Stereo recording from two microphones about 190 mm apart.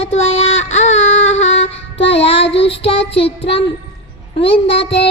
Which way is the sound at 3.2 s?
30° left (ahead or behind).